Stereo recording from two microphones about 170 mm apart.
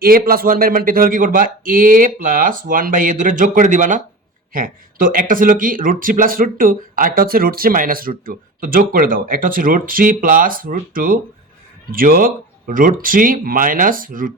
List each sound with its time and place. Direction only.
0.0 s a man's voice: 60° right (ahead or behind)